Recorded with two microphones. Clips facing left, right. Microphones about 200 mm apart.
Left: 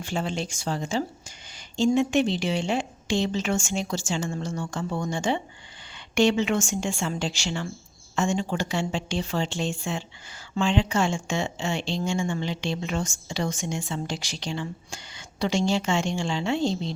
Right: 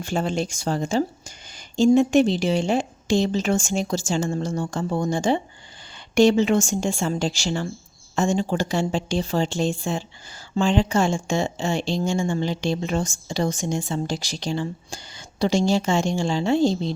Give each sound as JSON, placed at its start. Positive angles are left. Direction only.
{"t": 0.0, "sound": "a woman's voice", "side_deg": -45}